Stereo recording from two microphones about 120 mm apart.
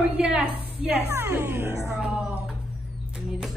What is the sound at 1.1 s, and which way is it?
Speech, 25° right (ahead or behind).